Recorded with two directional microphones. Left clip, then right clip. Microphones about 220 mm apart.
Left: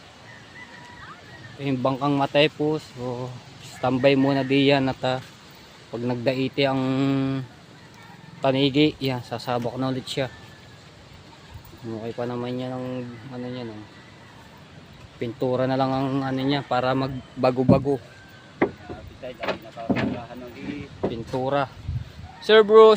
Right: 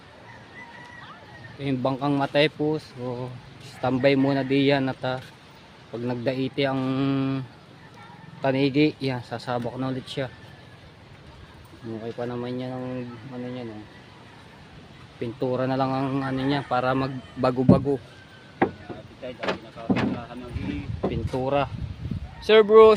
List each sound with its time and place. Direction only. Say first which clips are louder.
1.5 s speech: left 2 dB; 10° left (ahead or behind)
12.0 s speech: left 2 dB; 15° left (ahead or behind)
15.2 s speech: left 2 dB; 10° left (ahead or behind)
19.2 s speech: even; 25° right (ahead or behind)
21.1 s speech: even; centre (ahead or behind)